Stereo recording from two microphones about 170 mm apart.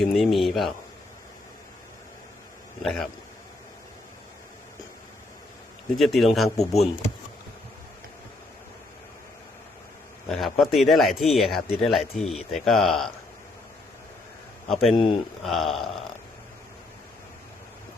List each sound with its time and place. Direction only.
0.0 s speech: centre (ahead or behind)
2.8 s speech: centre (ahead or behind)
6.0 s speech: centre (ahead or behind)
10.2 s speech: centre (ahead or behind)
14.7 s speech: centre (ahead or behind)
14.9 s speech: 30° left (ahead or behind)
15.4 s speech: centre (ahead or behind)